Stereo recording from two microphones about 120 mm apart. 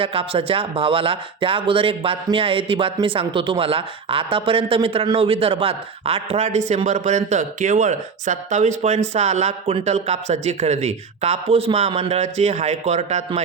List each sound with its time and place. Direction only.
0.0 s speech: 50° right (ahead or behind)
6.7 s speech: 75° right (ahead or behind)